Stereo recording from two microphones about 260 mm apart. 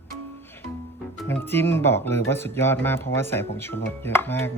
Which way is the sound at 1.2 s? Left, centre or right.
Centre.